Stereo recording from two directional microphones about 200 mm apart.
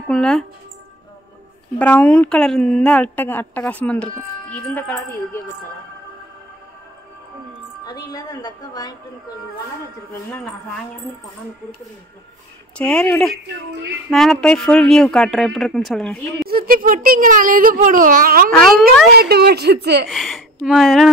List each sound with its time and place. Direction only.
0.1 s speech: 5° left (ahead or behind)
1.8 s a woman's voice: 5° left (ahead or behind)
7.8 s a woman's voice: 20° left (ahead or behind)
12.7 s speech: 5° left (ahead or behind)
16.4 s a child's voice: 45° right (ahead or behind)
18.6 s speech: centre (ahead or behind)
19.1 s a woman's voice: 50° right (ahead or behind)
20.1 s speech: centre (ahead or behind)